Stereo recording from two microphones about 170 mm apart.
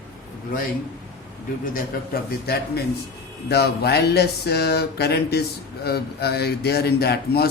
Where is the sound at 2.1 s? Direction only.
65° left (ahead or behind).